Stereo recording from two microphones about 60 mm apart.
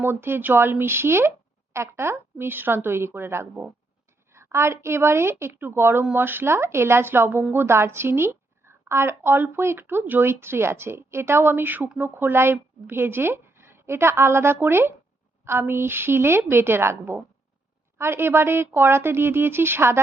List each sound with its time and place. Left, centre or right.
0.0 s a woman's voice: right
4.4 s a woman's voice: right